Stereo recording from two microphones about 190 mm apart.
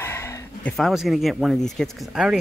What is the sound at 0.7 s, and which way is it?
Speech, centre (ahead or behind).